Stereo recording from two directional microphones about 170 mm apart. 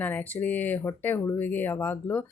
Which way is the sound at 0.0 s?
10° left (ahead or behind).